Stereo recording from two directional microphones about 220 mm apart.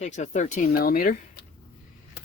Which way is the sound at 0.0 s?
35° left (ahead or behind).